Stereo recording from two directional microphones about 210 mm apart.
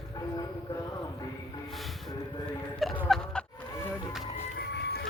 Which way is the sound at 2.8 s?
Centre (ahead or behind).